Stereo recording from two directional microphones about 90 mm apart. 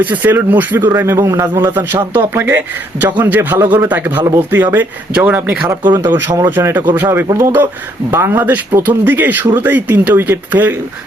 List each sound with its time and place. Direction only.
0.0 s speech: 20° right (ahead or behind)